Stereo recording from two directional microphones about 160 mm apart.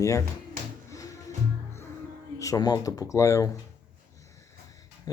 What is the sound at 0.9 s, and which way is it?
Music, 20° left (ahead or behind).